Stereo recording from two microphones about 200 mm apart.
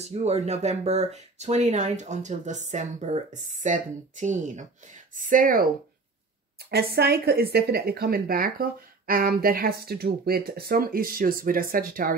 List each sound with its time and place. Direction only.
0.0 s speech: 35° right (ahead or behind)
6.7 s speech: 50° right (ahead or behind)